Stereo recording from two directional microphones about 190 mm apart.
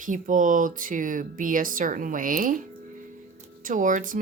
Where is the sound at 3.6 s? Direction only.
45° right (ahead or behind).